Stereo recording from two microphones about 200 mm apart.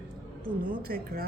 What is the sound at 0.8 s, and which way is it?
Speech, 50° right (ahead or behind).